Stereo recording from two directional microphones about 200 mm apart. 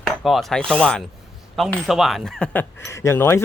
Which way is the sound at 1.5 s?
Centre (ahead or behind).